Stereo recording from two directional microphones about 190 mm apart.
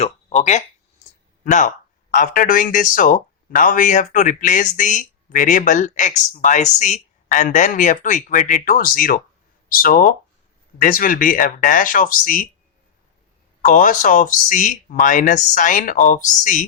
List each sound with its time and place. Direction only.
0.0 s a sound: 35° left (ahead or behind)
1.5 s speech: 40° left (ahead or behind)
13.6 s speech: 45° left (ahead or behind)